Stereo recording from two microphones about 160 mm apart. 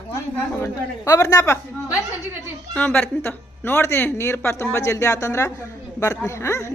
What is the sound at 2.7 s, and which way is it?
A woman's voice, 10° left (ahead or behind).